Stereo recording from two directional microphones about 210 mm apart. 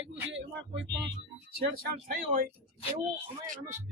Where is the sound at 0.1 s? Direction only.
60° right (ahead or behind).